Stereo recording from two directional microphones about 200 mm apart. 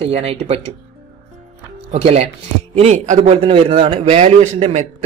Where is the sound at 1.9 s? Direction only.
30° right (ahead or behind).